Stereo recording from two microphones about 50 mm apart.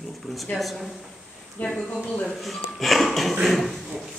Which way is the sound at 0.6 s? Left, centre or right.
Centre.